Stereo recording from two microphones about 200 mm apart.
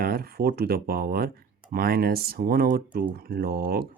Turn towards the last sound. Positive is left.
turn(degrees=-50)  # may be behind; listen again after turning